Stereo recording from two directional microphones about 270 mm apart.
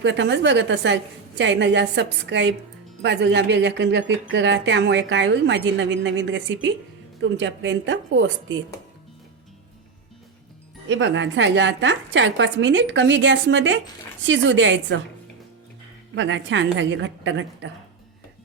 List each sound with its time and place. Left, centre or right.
0.0 s a woman's voice: right
10.8 s a woman's voice: right
16.1 s a woman's voice: right